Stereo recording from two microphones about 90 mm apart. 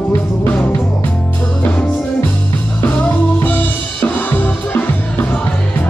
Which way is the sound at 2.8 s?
20° left (ahead or behind).